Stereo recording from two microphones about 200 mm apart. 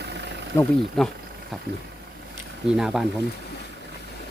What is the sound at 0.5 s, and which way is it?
Speech, 15° left (ahead or behind).